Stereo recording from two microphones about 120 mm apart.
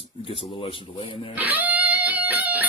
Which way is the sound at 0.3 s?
50° left (ahead or behind).